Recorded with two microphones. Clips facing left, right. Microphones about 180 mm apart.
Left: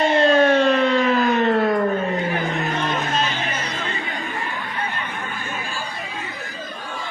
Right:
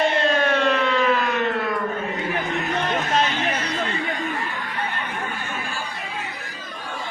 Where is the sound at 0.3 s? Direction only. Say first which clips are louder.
Left 5 dB; 35° left (ahead or behind).